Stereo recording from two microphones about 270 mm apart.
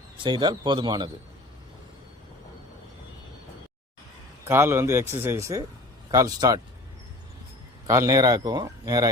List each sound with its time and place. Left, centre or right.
0.2 s speech: centre
4.4 s speech: centre
7.9 s speech: centre